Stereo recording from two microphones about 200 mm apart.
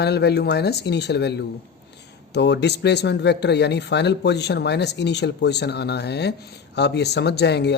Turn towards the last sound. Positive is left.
turn(degrees=55)  # may be behind; listen again after turning